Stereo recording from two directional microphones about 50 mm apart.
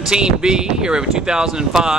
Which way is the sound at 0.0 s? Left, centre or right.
Centre.